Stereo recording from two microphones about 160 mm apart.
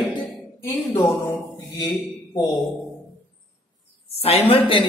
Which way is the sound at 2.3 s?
20° left (ahead or behind).